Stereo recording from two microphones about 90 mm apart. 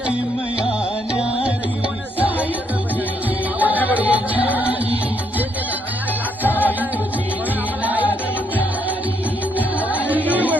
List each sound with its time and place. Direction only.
3.6 s music: 20° right (ahead or behind)
6.4 s music: 20° left (ahead or behind)
7.9 s music: 20° right (ahead or behind)
9.9 s music: 20° right (ahead or behind)